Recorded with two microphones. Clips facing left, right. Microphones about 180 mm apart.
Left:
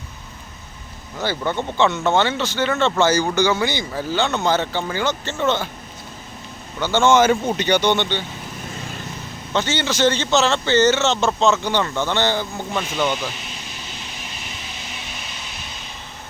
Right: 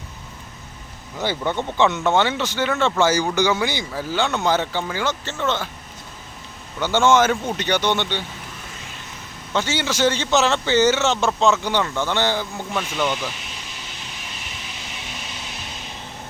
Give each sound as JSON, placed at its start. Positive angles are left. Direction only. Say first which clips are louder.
{"t": 1.2, "sound": "speech", "louder": "even", "side_deg": -15}
{"t": 6.7, "sound": "speech", "louder": "left 1 dB", "side_deg": -15}
{"t": 7.0, "sound": "speech", "louder": "left 2 dB", "side_deg": 0}
{"t": 9.5, "sound": "speech", "louder": "left 1 dB", "side_deg": -10}
{"t": 12.7, "sound": "speech", "louder": "left 1 dB", "side_deg": 10}